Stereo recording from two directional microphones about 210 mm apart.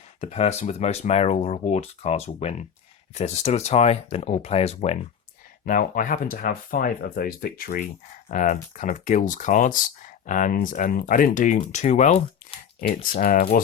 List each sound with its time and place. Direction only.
0.2 s speech: 30° left (ahead or behind)
5.6 s speech: 40° left (ahead or behind)